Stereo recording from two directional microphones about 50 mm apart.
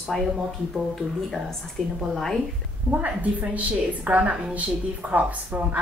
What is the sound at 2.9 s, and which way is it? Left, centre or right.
A woman's voice, right.